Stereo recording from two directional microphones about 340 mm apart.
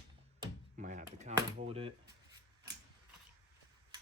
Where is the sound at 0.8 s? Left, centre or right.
Right.